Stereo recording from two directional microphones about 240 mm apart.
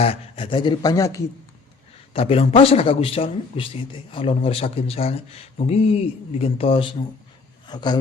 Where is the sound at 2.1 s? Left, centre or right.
Left.